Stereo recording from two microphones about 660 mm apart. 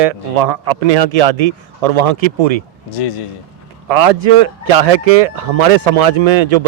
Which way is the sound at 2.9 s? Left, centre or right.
Left.